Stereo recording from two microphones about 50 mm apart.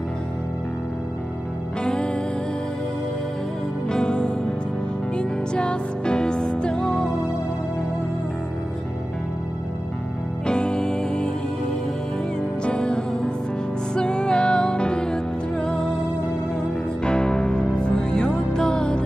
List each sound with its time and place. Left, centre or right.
1.8 s music: centre
3.9 s music: centre
6.9 s music: centre
10.4 s music: centre
12.7 s music: centre
17.0 s music: centre